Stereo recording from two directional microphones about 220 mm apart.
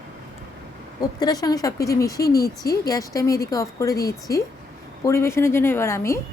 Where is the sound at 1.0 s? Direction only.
15° left (ahead or behind).